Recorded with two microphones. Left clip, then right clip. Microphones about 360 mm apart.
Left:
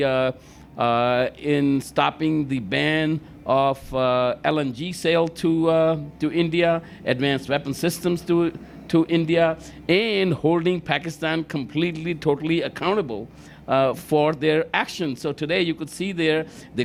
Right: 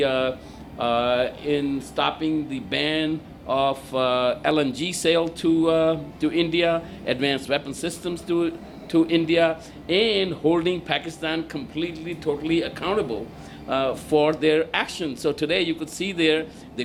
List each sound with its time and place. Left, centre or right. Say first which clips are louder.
0.0 s speech: left 1 dB; left
13.7 s speech: left 3 dB; left